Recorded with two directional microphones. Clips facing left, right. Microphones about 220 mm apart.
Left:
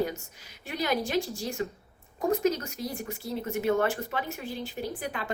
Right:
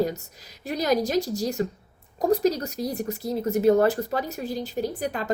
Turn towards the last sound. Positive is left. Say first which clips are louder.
# right 6 dB
turn(degrees=-40)  # may be behind; listen again after turning